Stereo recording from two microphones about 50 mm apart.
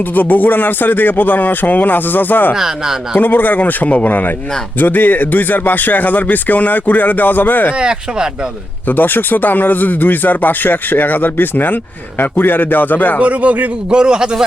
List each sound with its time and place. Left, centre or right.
0.1 s speech: left
2.6 s speech: centre
3.2 s speech: left
7.8 s speech: centre
8.9 s speech: left
13.1 s a man's voice: right
13.9 s speech: centre